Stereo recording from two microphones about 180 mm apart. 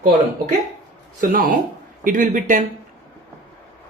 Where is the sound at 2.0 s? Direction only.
45° right (ahead or behind).